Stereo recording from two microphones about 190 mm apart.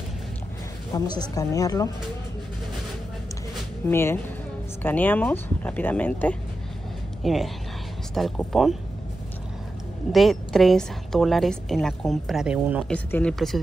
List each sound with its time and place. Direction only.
0.9 s speech: 20° left (ahead or behind)
3.8 s a woman's voice: 15° left (ahead or behind)
10.1 s a woman's voice: centre (ahead or behind)
12.9 s a woman's voice: 5° left (ahead or behind)